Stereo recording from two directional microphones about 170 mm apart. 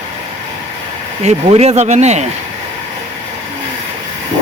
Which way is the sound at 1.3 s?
35° right (ahead or behind).